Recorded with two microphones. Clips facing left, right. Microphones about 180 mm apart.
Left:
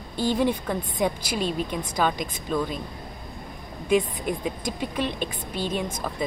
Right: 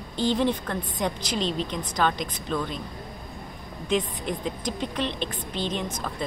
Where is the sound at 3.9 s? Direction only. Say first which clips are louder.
Left 4 dB; 10° left (ahead or behind).